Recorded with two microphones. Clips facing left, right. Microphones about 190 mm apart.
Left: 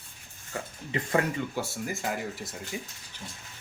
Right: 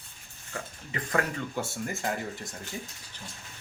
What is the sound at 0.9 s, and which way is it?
Speech, 25° left (ahead or behind).